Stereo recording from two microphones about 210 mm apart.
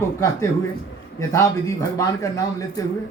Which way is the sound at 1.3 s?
15° left (ahead or behind).